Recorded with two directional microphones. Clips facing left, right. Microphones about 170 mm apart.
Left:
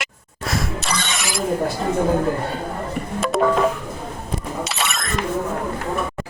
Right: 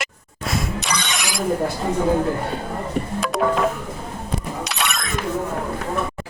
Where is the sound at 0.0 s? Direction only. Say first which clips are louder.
Right 1 dB; centre (ahead or behind).